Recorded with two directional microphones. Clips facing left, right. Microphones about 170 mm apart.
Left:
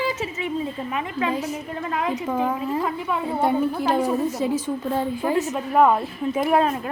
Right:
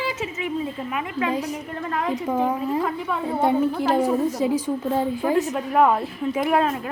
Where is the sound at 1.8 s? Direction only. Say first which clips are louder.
Even; 15° left (ahead or behind).